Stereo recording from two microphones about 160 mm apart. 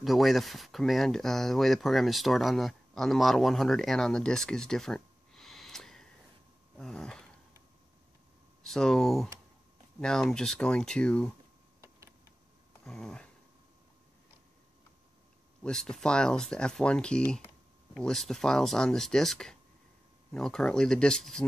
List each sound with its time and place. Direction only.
0.0 s speech: centre (ahead or behind)
6.8 s dog: 5° left (ahead or behind)
8.6 s speech: 5° left (ahead or behind)
11.8 s a sound: 20° right (ahead or behind)
12.8 s a sound: 5° left (ahead or behind)
15.6 s speech: 5° left (ahead or behind)